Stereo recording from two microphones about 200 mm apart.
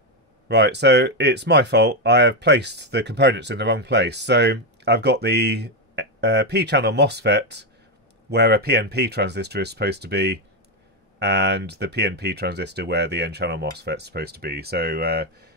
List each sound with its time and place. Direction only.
0.5 s speech: 55° right (ahead or behind)